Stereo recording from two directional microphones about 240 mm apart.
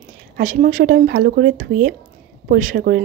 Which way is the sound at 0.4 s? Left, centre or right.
Right.